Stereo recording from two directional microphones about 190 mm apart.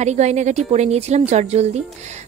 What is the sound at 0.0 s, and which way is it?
A woman's voice, 35° right (ahead or behind).